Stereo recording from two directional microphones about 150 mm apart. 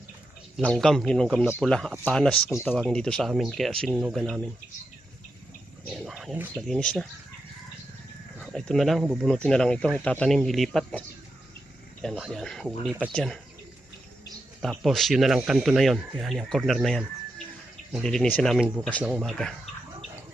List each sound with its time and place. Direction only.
0.6 s speech: 5° left (ahead or behind)
2.5 s speech: 20° left (ahead or behind)
2.7 s speech: 5° left (ahead or behind)
5.9 s wild animals: centre (ahead or behind)
6.6 s speech: 5° left (ahead or behind)
8.4 s speech: 5° left (ahead or behind)
12.1 s speech: centre (ahead or behind)
14.6 s speech: centre (ahead or behind)
18.0 s speech: 5° left (ahead or behind)